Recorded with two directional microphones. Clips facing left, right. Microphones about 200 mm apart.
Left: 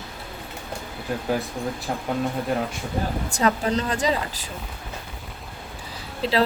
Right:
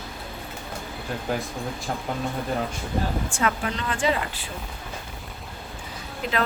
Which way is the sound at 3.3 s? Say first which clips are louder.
Left 4 dB; 35° left (ahead or behind).